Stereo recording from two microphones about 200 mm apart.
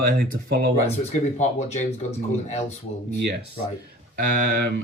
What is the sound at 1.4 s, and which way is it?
Speech, 35° left (ahead or behind).